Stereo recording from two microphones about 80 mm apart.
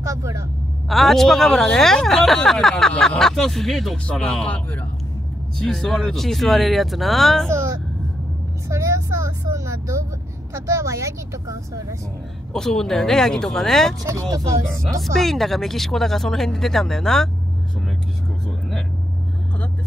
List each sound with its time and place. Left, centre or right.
0.0 s vehicle: right
0.8 s speech: centre
5.6 s speech: centre
7.4 s speech: right
12.5 s speech: centre
14.3 s speech: right
14.7 s speech: centre